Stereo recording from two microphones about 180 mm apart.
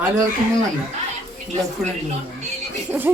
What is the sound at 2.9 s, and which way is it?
Speech, 10° right (ahead or behind).